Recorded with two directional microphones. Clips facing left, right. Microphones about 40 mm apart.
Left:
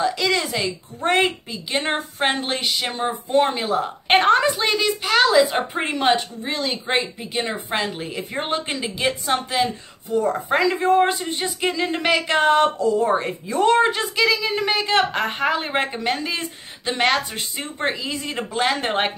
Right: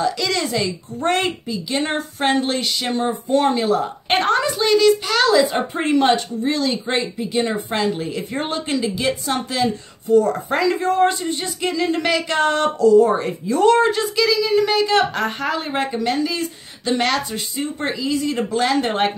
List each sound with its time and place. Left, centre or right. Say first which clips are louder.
0.0 s a woman's voice: even; centre